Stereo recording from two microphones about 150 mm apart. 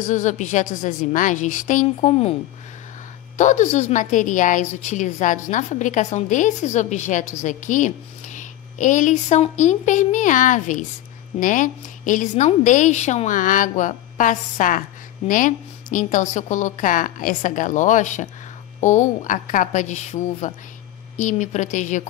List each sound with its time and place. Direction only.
0.0 s a woman's voice: 55° left (ahead or behind)
2.0 s a woman's voice: 45° left (ahead or behind)
3.3 s a woman's voice: 55° left (ahead or behind)